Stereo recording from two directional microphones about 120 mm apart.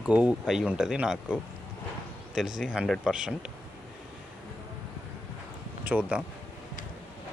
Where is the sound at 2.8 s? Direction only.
5° left (ahead or behind).